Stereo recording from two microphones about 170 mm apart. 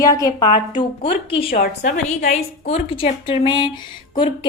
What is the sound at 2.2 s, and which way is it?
Speech, 40° left (ahead or behind).